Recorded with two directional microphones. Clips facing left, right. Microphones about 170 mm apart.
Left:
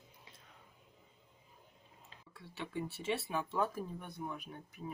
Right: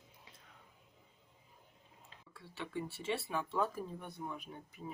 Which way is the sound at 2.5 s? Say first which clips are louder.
Left 1 dB; 15° left (ahead or behind).